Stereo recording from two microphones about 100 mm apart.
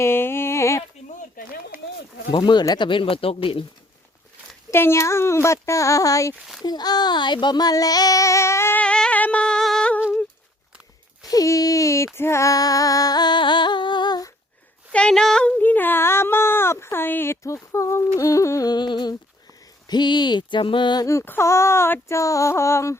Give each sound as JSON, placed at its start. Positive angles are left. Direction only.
{"t": 0.0, "sound": "a sound", "side_deg": 25}
{"t": 2.3, "sound": "speech", "side_deg": 50}
{"t": 4.7, "sound": "a sound", "side_deg": 25}
{"t": 6.4, "sound": "speech", "side_deg": -5}
{"t": 6.7, "sound": "child singing", "side_deg": 45}
{"t": 8.8, "sound": "humming", "side_deg": 10}
{"t": 11.3, "sound": "child singing", "side_deg": 35}
{"t": 14.9, "sound": "speech", "side_deg": 10}
{"t": 18.2, "sound": "child singing", "side_deg": 35}
{"t": 19.9, "sound": "a sound", "side_deg": 45}
{"t": 21.0, "sound": "child singing", "side_deg": 30}
{"t": 21.2, "sound": "a sound", "side_deg": 25}